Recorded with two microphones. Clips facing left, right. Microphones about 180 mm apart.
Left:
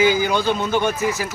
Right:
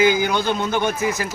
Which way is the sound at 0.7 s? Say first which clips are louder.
Left 1 dB; 15° right (ahead or behind).